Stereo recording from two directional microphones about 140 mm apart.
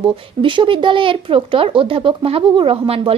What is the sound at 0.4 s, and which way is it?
Speech, 35° right (ahead or behind).